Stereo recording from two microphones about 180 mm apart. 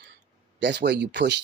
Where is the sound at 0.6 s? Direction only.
70° right (ahead or behind).